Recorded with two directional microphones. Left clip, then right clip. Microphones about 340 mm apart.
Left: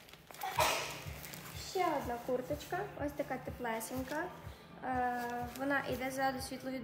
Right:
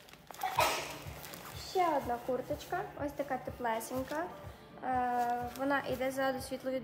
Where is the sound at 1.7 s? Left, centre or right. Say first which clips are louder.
Right 4 dB; centre.